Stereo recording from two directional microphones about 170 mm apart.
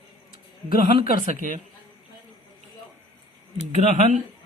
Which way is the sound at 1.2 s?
45° right (ahead or behind).